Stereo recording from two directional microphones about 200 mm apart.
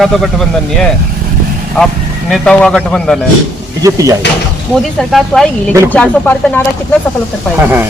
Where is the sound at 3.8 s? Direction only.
15° right (ahead or behind).